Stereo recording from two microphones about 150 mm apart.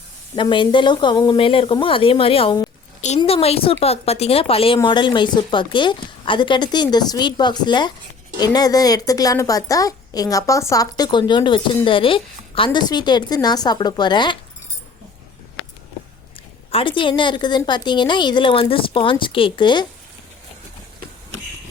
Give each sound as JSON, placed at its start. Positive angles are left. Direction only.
{"t": 0.3, "sound": "a woman's voice", "side_deg": 30}
{"t": 16.7, "sound": "a woman's voice", "side_deg": 35}